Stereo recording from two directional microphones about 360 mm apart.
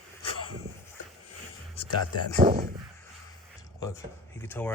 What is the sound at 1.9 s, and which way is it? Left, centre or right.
Speech, left.